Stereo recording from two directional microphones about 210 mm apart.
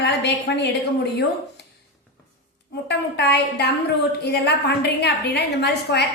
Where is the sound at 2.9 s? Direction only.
50° left (ahead or behind).